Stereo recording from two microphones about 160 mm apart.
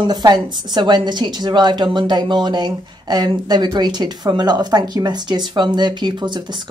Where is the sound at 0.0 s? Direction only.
25° right (ahead or behind).